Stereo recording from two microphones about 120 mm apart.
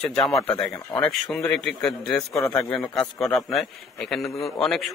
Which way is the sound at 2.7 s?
5° left (ahead or behind).